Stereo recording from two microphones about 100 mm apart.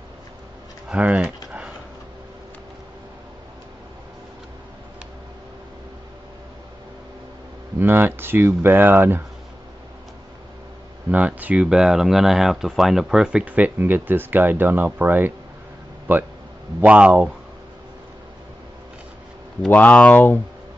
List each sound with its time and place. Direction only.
0.8 s speech: 15° right (ahead or behind)
7.8 s speech: 20° right (ahead or behind)
11.1 s speech: 15° right (ahead or behind)
19.7 s speech: 15° left (ahead or behind)